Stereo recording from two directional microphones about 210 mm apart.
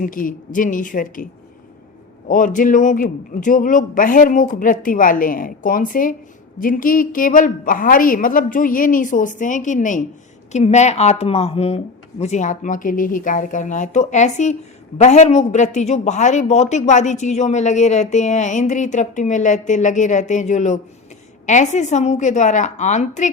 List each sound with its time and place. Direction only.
0.0 s speech: 40° left (ahead or behind)